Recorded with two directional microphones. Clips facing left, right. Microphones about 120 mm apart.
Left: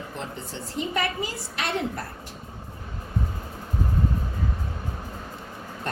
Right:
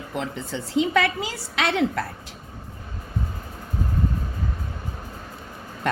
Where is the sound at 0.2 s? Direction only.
90° right.